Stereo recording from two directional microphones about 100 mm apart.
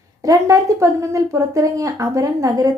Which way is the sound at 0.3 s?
35° right (ahead or behind).